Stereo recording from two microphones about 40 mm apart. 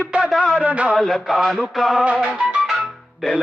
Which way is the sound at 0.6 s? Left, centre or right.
Right.